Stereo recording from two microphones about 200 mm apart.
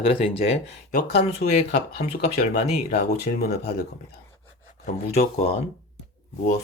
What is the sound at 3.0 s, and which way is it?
Speech, 50° left (ahead or behind).